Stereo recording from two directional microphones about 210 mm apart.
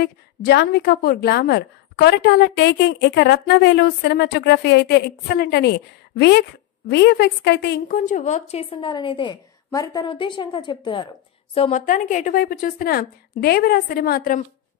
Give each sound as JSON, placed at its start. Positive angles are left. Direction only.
{"t": 0.0, "sound": "a woman's voice", "side_deg": 50}